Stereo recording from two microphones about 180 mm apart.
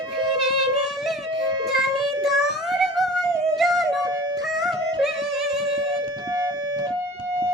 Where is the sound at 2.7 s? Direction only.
Centre (ahead or behind).